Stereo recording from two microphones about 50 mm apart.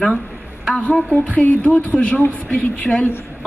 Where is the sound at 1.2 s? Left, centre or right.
Left.